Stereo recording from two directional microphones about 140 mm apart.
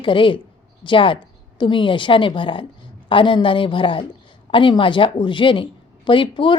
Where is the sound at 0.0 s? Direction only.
35° left (ahead or behind).